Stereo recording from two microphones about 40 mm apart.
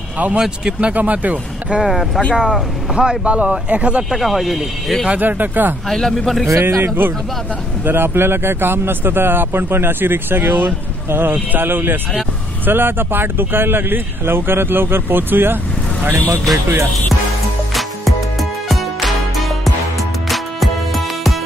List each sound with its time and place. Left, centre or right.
0.4 s speech: right
0.9 s speech: right
1.8 s speech: centre
2.9 s speech: right
3.3 s speech: right
4.2 s speech: centre
5.2 s speech: right
5.9 s speech: centre
6.6 s speech: right
18.7 s music: centre